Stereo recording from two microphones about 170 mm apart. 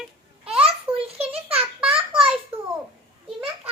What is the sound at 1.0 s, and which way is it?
Speech, 35° right (ahead or behind).